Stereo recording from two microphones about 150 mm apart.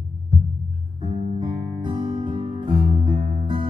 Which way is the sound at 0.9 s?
30° right (ahead or behind).